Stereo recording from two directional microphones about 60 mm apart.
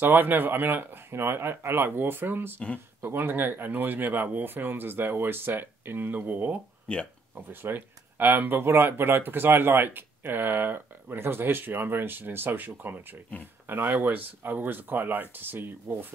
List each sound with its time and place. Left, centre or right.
0.0 s speech: right
6.9 s speech: centre
7.3 s speech: right